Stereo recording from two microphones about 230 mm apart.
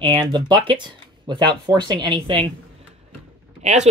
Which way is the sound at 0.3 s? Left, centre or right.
Centre.